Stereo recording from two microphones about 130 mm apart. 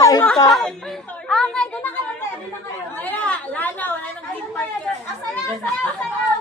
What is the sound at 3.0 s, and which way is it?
Chatter, 10° left (ahead or behind).